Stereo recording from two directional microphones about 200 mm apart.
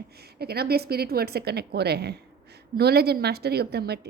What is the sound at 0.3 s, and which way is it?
A woman's voice, 50° right (ahead or behind).